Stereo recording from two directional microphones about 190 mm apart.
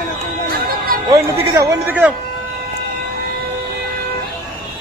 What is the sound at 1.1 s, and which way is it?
A man's voice, 15° right (ahead or behind).